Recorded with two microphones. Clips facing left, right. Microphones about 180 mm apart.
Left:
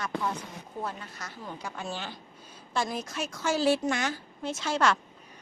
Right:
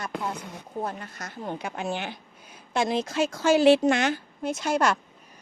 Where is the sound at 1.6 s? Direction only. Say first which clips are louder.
Right 4 dB; 70° right (ahead or behind).